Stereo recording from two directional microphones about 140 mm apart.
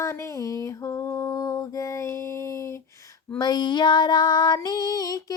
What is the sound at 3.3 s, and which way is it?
Female singing, 30° left (ahead or behind).